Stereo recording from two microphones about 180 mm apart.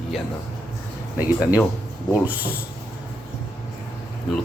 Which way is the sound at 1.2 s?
10° right (ahead or behind).